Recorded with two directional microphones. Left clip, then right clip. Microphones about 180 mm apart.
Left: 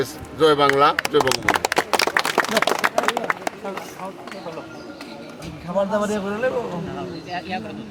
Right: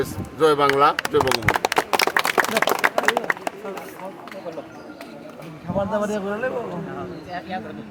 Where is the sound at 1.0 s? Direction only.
40° left (ahead or behind).